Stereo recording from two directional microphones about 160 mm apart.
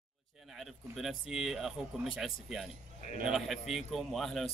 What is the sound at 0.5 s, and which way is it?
A man's voice, centre (ahead or behind).